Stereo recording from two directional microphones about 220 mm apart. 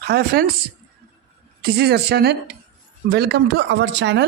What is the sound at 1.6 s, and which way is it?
Speech, 45° right (ahead or behind).